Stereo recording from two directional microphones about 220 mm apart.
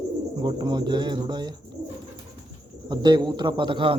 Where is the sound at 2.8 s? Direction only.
20° right (ahead or behind).